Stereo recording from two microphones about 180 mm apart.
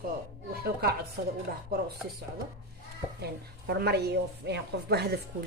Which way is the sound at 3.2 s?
65° right (ahead or behind).